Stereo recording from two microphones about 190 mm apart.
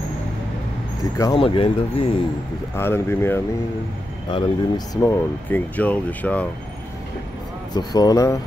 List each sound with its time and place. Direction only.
1.1 s speech: 20° left (ahead or behind)
1.4 s speech: 30° left (ahead or behind)
2.7 s speech: 10° left (ahead or behind)
4.3 s speech: 25° left (ahead or behind); by 6.4 s 10° left (ahead or behind)
7.7 s speech: 20° left (ahead or behind)